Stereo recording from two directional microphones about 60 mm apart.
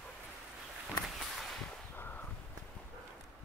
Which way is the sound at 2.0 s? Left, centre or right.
Left.